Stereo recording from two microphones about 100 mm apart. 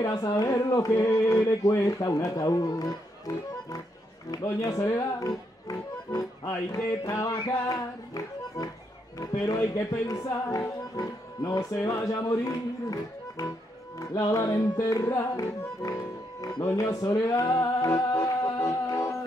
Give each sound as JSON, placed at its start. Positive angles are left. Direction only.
{"t": 0.0, "sound": "speech", "side_deg": 35}
{"t": 0.7, "sound": "speech", "side_deg": 30}
{"t": 7.3, "sound": "speech", "side_deg": 45}
{"t": 16.5, "sound": "music", "side_deg": 35}